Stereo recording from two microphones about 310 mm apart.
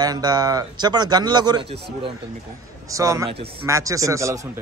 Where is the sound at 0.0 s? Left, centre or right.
Centre.